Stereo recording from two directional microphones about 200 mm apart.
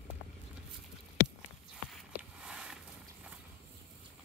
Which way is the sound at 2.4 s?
5° right (ahead or behind).